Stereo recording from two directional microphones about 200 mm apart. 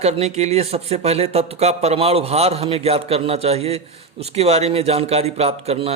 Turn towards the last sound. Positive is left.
turn(degrees=-30)  # may be behind; listen again after turning